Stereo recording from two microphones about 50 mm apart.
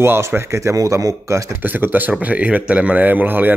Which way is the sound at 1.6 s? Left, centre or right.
Right.